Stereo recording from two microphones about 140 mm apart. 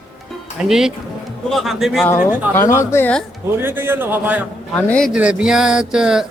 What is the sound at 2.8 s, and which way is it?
Speech, 15° left (ahead or behind).